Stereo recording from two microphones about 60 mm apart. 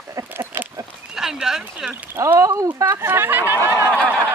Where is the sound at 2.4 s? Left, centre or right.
Right.